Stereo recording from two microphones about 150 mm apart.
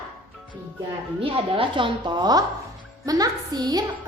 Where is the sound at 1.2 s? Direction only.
35° right (ahead or behind).